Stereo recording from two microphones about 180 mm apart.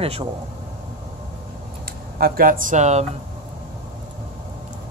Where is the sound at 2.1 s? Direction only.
55° right (ahead or behind); by 3.1 s 40° right (ahead or behind).